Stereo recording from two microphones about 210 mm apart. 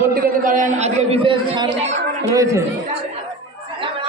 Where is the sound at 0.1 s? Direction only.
40° right (ahead or behind); by 2.6 s 15° right (ahead or behind).